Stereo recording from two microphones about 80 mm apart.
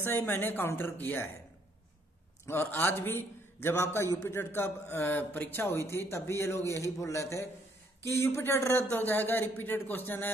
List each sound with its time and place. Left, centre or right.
0.0 s a man's voice: left
2.4 s a man's voice: left